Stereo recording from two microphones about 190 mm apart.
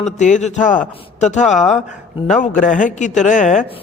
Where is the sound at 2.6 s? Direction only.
45° left (ahead or behind).